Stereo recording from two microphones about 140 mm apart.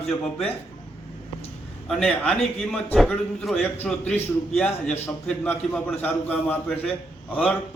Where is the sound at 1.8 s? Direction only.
5° left (ahead or behind).